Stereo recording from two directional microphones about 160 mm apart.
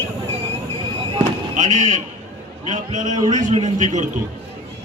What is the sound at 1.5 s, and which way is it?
A man's voice, 50° right (ahead or behind).